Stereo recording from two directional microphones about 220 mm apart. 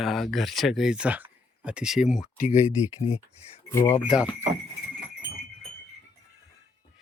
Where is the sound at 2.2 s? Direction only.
35° left (ahead or behind).